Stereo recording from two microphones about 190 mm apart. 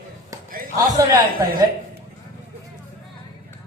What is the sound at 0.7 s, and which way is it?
Speech, 20° right (ahead or behind).